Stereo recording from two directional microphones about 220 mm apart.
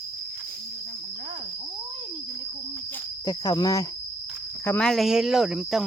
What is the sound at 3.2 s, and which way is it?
Speech, 15° left (ahead or behind).